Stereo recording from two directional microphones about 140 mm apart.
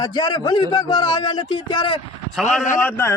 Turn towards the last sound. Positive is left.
turn(degrees=20)  # may be behind; listen again after turning